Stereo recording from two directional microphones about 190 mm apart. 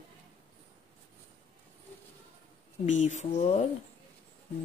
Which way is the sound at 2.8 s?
40° left (ahead or behind).